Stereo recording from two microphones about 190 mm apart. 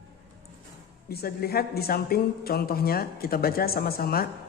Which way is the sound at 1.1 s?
55° left (ahead or behind).